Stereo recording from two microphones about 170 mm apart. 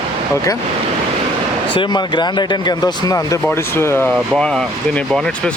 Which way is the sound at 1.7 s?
25° left (ahead or behind).